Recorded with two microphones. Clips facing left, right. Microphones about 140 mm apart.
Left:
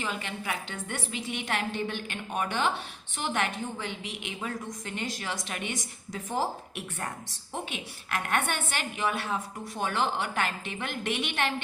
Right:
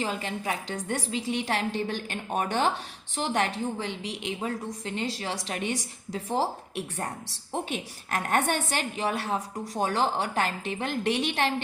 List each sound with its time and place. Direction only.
0.0 s a woman's voice: 35° right (ahead or behind)